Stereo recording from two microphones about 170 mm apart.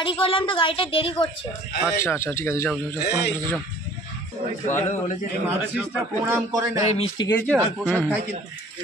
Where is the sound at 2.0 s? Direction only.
15° left (ahead or behind).